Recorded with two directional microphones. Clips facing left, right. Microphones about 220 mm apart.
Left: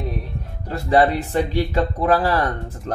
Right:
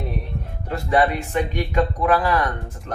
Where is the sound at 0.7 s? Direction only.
35° left (ahead or behind).